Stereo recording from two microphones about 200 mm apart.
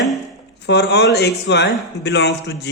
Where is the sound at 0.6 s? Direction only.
60° left (ahead or behind).